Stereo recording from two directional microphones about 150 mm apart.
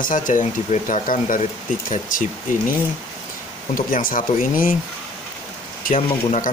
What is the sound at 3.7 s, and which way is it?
Speech, 65° left (ahead or behind).